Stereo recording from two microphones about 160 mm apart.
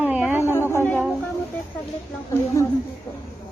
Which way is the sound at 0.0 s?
10° right (ahead or behind).